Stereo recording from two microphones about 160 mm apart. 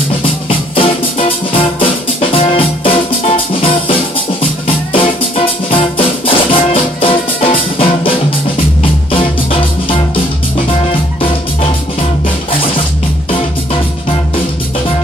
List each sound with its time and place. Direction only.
0.2 s music: 35° left (ahead or behind)
9.1 s music: 35° left (ahead or behind)